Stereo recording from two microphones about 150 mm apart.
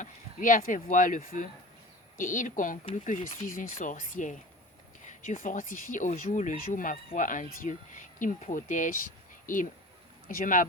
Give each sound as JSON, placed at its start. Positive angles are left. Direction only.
{"t": 0.0, "sound": "speech", "side_deg": 60}
{"t": 10.2, "sound": "speech", "side_deg": 65}